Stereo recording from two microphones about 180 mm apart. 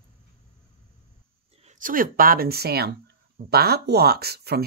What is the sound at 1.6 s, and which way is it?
Speech, 45° right (ahead or behind).